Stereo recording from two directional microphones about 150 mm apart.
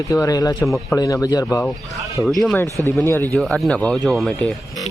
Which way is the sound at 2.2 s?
Centre (ahead or behind).